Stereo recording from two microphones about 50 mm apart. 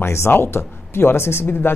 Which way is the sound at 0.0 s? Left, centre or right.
Left.